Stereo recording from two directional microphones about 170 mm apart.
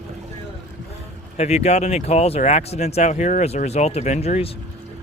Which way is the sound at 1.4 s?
40° left (ahead or behind).